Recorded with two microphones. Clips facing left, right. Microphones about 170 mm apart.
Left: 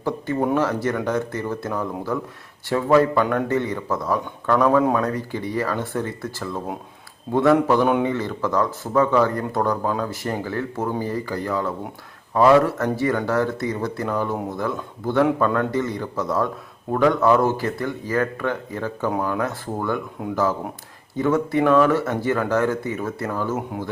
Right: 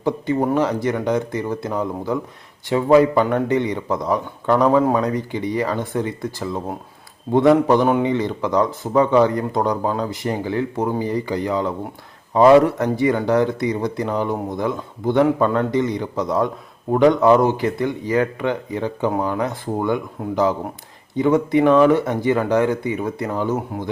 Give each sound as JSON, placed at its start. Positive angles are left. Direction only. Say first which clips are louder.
{"t": 0.0, "sound": "speech", "louder": "right 3 dB", "side_deg": -15}
{"t": 7.3, "sound": "speech", "louder": "right 4 dB", "side_deg": -5}
{"t": 8.0, "sound": "speech", "louder": "right 3 dB", "side_deg": -15}